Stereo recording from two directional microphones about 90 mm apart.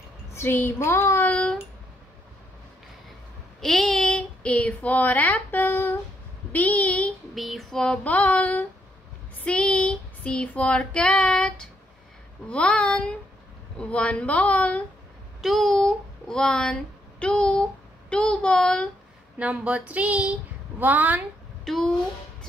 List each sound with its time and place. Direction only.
0.3 s a sound: 30° left (ahead or behind)
1.3 s female singing: 10° left (ahead or behind)
3.6 s a sound: 5° left (ahead or behind); by 5.9 s 25° left (ahead or behind)
6.5 s speech: 15° left (ahead or behind)
7.3 s female singing: centre (ahead or behind)
15.4 s a child's voice: centre (ahead or behind)
18.1 s female singing: 15° left (ahead or behind)
19.3 s speech: 15° right (ahead or behind)
21.6 s speech: 5° left (ahead or behind)